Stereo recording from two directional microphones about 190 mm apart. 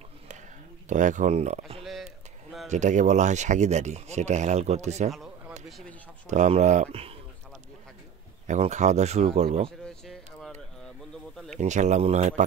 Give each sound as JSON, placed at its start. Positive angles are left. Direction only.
{"t": 0.8, "sound": "speech", "side_deg": -40}
{"t": 5.7, "sound": "speech", "side_deg": 0}
{"t": 6.2, "sound": "speech", "side_deg": -40}
{"t": 8.5, "sound": "speech", "side_deg": -35}
{"t": 9.7, "sound": "a sound", "side_deg": 0}
{"t": 11.5, "sound": "speech", "side_deg": -40}